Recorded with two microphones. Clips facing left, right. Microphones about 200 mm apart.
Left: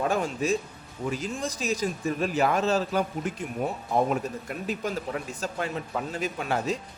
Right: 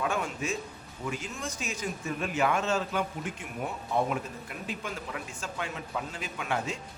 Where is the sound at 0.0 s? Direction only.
35° left (ahead or behind).